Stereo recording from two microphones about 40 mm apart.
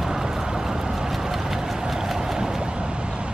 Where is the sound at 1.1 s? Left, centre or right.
Centre.